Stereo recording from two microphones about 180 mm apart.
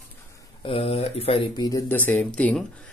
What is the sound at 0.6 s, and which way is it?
Speech, 30° left (ahead or behind).